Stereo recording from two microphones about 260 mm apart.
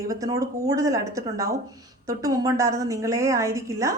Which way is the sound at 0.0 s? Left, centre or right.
Centre.